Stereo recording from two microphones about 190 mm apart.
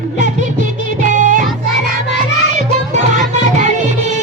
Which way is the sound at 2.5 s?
40° right (ahead or behind).